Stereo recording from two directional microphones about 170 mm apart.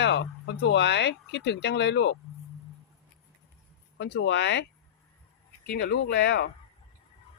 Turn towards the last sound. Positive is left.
turn(degrees=80)